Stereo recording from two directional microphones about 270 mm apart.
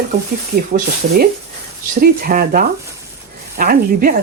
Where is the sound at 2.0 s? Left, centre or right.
Right.